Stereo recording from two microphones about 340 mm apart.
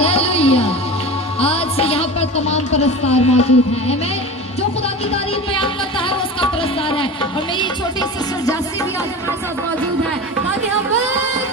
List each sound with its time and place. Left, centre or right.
0.0 s music: centre
1.4 s a woman's voice: centre
5.1 s music: centre